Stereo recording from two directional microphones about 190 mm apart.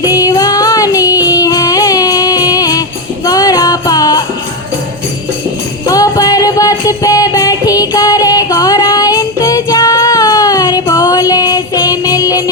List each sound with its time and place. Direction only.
0.0 s music: 20° left (ahead or behind)
5.8 s music: 20° left (ahead or behind)